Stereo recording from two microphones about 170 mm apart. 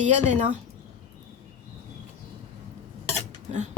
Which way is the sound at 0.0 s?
45° right (ahead or behind).